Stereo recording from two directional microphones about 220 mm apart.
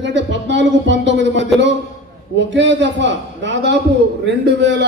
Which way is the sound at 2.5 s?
55° right (ahead or behind).